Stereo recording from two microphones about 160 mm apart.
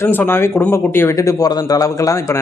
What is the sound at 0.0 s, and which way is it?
Speech, 15° left (ahead or behind).